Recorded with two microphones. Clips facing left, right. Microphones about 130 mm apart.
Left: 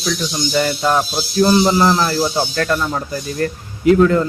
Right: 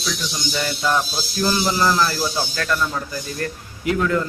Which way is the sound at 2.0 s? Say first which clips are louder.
Left 5 dB; 45° left (ahead or behind).